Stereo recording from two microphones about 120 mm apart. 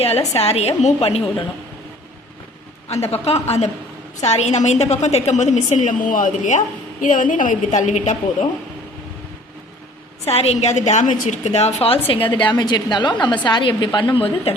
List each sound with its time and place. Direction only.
0.0 s a woman's voice: 60° left (ahead or behind)
2.9 s a woman's voice: 60° left (ahead or behind); by 8.4 s 80° left
10.2 s a woman's voice: 60° left (ahead or behind)
12.5 s a woman's voice: 35° left (ahead or behind)